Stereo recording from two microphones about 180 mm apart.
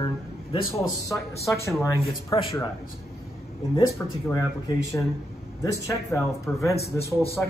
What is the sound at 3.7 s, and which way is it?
A man's voice, 20° left (ahead or behind).